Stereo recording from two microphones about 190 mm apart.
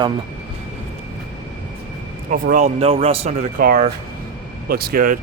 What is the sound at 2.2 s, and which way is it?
Speech, 45° right (ahead or behind).